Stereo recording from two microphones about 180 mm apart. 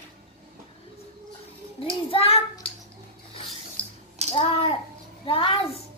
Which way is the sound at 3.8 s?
5° left (ahead or behind).